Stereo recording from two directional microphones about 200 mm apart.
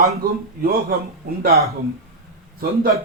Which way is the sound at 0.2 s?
50° right (ahead or behind).